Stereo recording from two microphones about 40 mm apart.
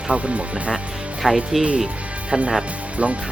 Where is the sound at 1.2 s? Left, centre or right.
Centre.